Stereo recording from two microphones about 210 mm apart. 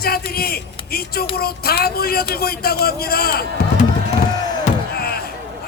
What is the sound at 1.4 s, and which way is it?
A man's voice, 45° left (ahead or behind).